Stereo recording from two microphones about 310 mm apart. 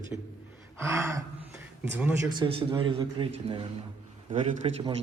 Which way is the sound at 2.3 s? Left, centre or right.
Centre.